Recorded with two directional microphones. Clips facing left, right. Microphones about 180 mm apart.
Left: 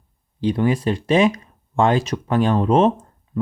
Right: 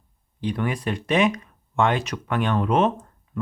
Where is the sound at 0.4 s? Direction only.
30° left (ahead or behind).